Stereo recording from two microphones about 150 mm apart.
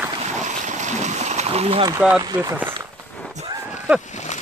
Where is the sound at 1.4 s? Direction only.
45° right (ahead or behind).